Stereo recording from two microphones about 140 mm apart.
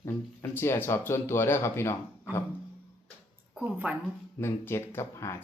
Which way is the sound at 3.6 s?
10° right (ahead or behind).